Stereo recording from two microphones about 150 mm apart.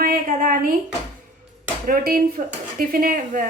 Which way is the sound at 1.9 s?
70° right (ahead or behind).